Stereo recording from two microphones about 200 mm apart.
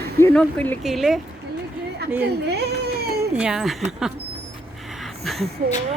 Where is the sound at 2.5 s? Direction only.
55° right (ahead or behind).